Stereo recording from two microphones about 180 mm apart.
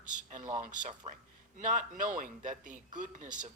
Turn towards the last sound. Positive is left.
turn(degrees=-45)  # may be behind; listen again after turning